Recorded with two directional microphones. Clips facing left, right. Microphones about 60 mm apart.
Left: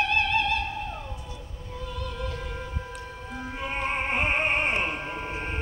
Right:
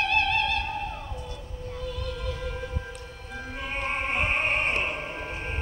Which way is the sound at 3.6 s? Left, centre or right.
Centre.